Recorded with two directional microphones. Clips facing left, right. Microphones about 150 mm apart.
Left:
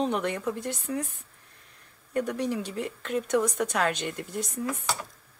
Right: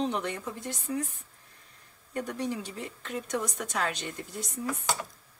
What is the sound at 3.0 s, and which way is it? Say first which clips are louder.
A woman's voice: left 7 dB; 75° left (ahead or behind).